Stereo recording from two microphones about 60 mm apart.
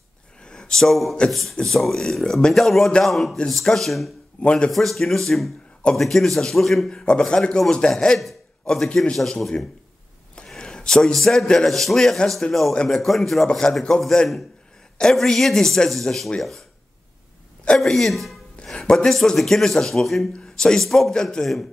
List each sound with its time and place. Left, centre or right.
0.4 s a sound: centre
1.3 s a man's voice: centre
4.4 s speech: centre
4.6 s a man's voice: centre
6.9 s a man's voice: centre
10.3 s a sound: centre
11.1 s a man's voice: centre
15.0 s a man's voice: centre
17.7 s a man's voice: centre